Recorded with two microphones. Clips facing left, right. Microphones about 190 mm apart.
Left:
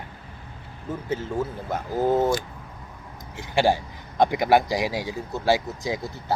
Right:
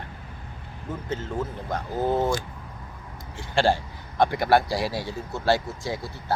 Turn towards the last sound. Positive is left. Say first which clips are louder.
# left 2 dB
turn(degrees=15)  # may be behind; listen again after turning